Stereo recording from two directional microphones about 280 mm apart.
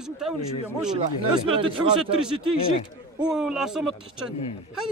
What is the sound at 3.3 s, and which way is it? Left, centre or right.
Speech, centre.